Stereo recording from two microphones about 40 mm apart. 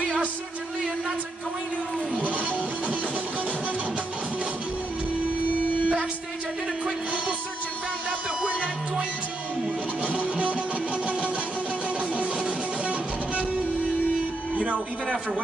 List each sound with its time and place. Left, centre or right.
2.1 s music: right
5.5 s music: right
10.3 s music: right
11.1 s guitar: right
12.2 s music: right
14.5 s a sound: right